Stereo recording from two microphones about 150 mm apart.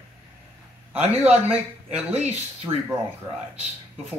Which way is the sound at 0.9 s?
45° right (ahead or behind).